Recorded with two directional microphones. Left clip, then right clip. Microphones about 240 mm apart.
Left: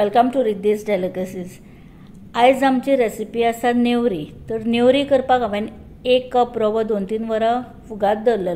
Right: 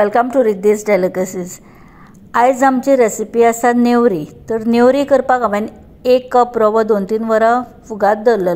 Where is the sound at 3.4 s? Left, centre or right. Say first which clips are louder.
Right 7 dB; centre.